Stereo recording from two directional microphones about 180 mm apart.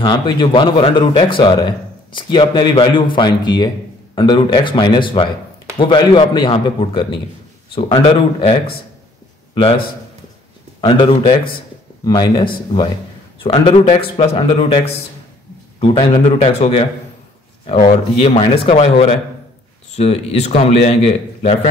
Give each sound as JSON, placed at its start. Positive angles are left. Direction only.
{"t": 0.0, "sound": "a man's voice", "side_deg": 25}
{"t": 10.8, "sound": "a man's voice", "side_deg": 25}
{"t": 15.8, "sound": "a man's voice", "side_deg": 30}
{"t": 18.2, "sound": "a man's voice", "side_deg": 30}